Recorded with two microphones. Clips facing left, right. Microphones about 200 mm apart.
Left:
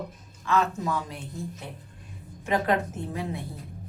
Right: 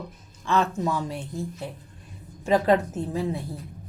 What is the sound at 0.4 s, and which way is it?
Speech, 30° right (ahead or behind).